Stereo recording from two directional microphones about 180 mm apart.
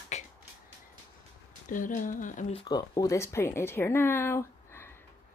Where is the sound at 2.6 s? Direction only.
20° left (ahead or behind).